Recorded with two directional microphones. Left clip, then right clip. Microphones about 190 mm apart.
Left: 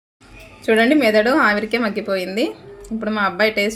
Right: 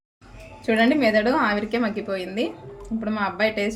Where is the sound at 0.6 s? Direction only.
45° left (ahead or behind).